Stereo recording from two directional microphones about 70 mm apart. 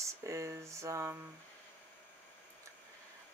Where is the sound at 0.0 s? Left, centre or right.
Right.